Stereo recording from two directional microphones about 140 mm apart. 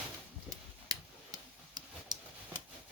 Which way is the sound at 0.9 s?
30° right (ahead or behind).